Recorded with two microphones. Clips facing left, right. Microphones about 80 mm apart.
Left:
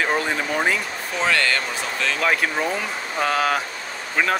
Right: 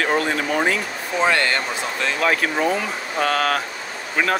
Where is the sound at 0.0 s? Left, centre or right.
Centre.